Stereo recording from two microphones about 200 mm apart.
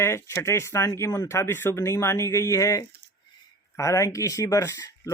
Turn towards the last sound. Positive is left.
turn(degrees=15)  # may be behind; listen again after turning